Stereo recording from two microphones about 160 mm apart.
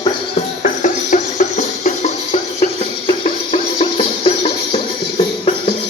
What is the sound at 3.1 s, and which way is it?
Music, 35° left (ahead or behind).